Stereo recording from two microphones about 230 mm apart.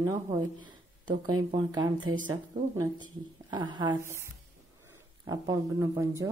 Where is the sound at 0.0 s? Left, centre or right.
Centre.